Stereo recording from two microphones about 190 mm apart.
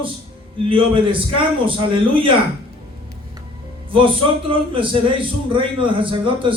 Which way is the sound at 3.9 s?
30° right (ahead or behind).